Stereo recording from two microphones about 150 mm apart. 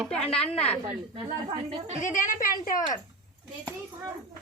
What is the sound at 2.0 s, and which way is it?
Speech, 55° left (ahead or behind).